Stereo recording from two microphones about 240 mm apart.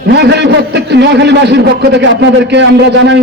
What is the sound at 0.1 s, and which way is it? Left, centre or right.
A man's voice, right.